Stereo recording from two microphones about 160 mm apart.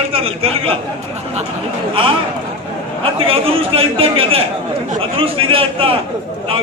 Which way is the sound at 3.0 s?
35° right (ahead or behind).